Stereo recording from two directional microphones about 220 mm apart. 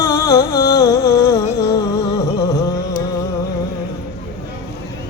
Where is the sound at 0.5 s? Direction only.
45° left (ahead or behind).